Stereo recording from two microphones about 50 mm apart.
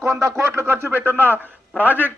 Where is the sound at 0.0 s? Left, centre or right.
Right.